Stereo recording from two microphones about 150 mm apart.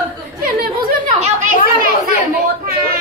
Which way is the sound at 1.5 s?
65° right (ahead or behind).